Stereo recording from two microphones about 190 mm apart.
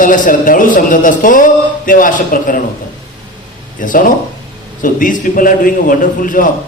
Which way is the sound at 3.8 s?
45° left (ahead or behind).